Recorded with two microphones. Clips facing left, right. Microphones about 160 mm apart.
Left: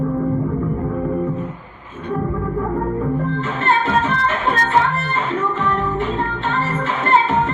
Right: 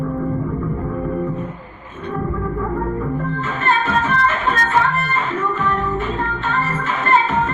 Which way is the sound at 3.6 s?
20° left (ahead or behind).